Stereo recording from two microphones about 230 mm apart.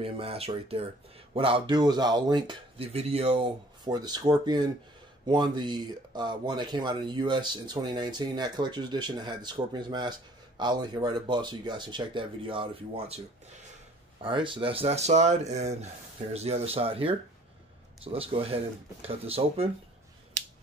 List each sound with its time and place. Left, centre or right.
0.0 s speech: right
14.2 s speech: right